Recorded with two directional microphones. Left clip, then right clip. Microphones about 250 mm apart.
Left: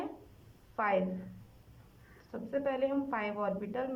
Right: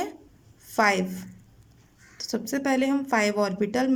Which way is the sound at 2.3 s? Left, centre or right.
Right.